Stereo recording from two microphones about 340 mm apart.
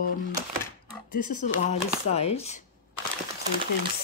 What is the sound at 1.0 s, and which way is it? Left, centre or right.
Speech, left.